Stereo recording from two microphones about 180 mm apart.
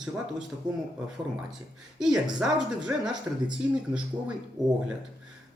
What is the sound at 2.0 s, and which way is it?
Speech, 5° right (ahead or behind).